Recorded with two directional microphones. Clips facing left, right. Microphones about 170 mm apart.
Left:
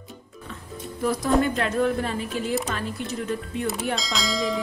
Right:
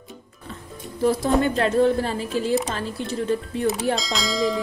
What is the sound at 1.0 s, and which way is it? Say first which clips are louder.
Speech: right 2 dB; 30° right (ahead or behind).